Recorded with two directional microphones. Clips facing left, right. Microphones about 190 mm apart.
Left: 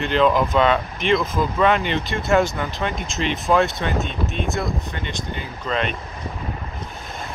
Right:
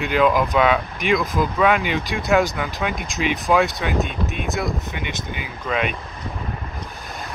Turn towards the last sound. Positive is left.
turn(degrees=-10)  # may be behind; listen again after turning